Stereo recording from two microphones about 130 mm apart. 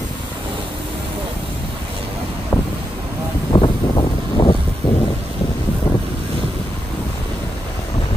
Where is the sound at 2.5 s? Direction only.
5° left (ahead or behind).